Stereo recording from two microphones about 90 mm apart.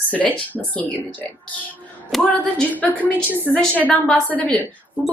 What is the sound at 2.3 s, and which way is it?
Speech, 15° left (ahead or behind).